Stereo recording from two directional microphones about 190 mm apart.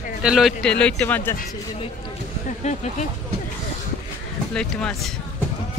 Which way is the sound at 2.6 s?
40° left (ahead or behind).